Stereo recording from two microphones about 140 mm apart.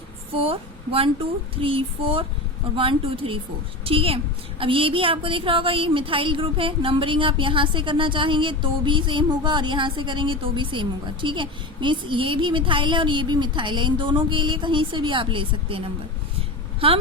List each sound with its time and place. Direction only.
0.3 s a woman's voice: 40° right (ahead or behind)